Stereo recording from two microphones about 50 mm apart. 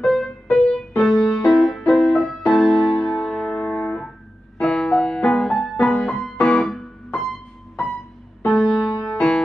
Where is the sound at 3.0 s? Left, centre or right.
Centre.